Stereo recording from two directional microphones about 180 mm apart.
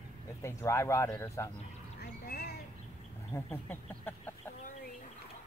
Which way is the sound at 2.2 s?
60° left (ahead or behind).